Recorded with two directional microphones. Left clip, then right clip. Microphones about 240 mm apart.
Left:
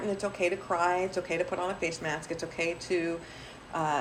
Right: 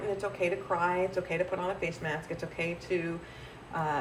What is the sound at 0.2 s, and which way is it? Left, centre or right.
Speech, centre.